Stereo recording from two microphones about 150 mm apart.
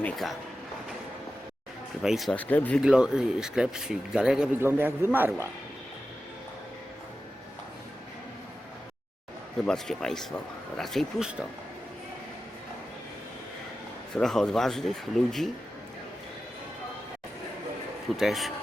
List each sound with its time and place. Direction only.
0.0 s speech: centre (ahead or behind)
2.0 s speech: centre (ahead or behind)
2.3 s speech: 10° left (ahead or behind)
2.8 s speech: 5° right (ahead or behind)
9.6 s speech: 5° left (ahead or behind)
14.1 s speech: 5° left (ahead or behind)
18.2 s speech: centre (ahead or behind)